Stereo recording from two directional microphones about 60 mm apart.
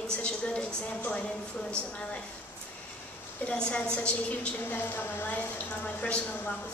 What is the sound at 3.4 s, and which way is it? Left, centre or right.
Speech, centre.